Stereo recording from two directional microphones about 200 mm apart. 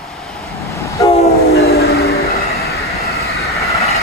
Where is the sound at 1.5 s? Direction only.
50° left (ahead or behind).